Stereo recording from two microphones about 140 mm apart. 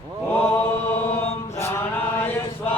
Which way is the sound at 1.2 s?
20° left (ahead or behind).